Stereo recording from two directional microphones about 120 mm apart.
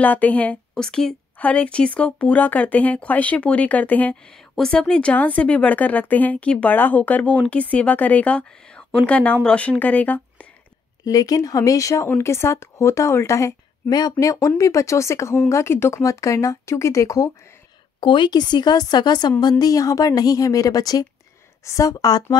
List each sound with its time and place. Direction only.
0.0 s a woman's voice: 15° left (ahead or behind)
11.1 s speech: 30° left (ahead or behind)
18.0 s speech: 40° left (ahead or behind)